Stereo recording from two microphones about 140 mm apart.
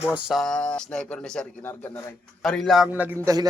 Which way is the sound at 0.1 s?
Centre (ahead or behind).